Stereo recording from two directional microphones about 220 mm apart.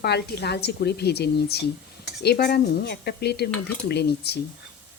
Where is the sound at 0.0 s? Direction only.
50° left (ahead or behind).